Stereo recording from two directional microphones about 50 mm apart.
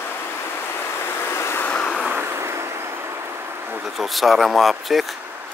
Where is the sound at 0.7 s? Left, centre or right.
Left.